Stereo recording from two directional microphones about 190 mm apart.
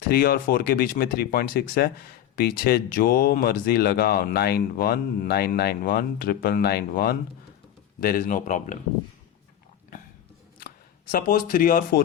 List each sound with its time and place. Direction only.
0.1 s speech: 50° left (ahead or behind)
11.1 s speech: 50° left (ahead or behind)